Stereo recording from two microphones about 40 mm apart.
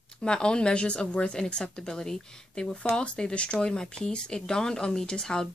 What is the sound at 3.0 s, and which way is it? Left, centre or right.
Speech, left.